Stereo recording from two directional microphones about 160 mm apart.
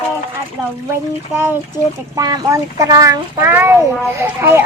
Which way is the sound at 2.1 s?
20° right (ahead or behind).